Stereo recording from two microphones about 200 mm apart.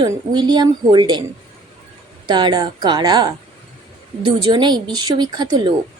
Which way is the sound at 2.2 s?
20° right (ahead or behind).